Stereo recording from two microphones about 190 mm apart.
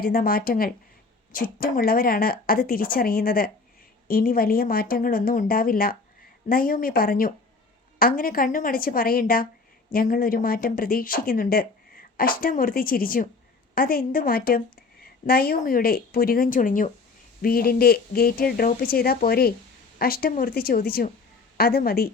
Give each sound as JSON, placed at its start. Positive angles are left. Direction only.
{"t": 0.0, "sound": "speech", "side_deg": 50}